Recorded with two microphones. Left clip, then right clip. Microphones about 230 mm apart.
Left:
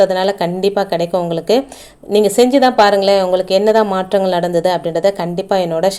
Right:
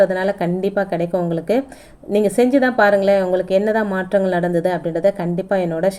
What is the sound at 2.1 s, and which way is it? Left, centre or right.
A woman's voice, centre.